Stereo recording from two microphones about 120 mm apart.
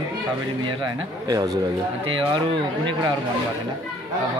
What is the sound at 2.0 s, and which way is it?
Speech, 45° right (ahead or behind).